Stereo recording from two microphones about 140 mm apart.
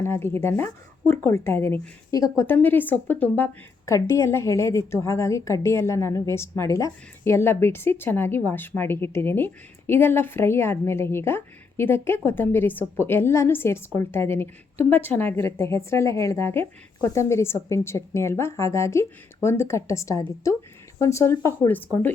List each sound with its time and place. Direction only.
0.0 s a woman's voice: 15° left (ahead or behind)
2.5 s a woman's voice: 15° left (ahead or behind)